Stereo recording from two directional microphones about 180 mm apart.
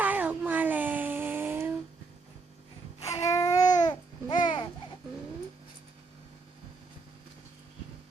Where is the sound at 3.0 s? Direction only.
15° left (ahead or behind).